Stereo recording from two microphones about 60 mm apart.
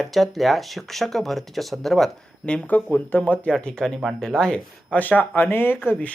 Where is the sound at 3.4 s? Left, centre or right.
Centre.